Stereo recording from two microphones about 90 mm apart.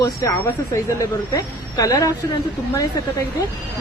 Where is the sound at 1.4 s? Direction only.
40° left (ahead or behind).